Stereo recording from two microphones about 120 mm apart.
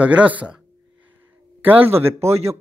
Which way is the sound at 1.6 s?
15° right (ahead or behind).